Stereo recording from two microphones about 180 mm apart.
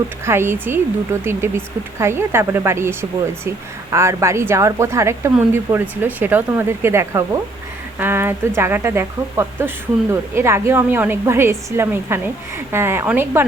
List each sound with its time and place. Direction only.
0.3 s speech: 15° right (ahead or behind)